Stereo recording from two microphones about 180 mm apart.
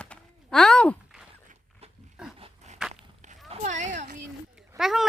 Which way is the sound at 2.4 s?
40° right (ahead or behind).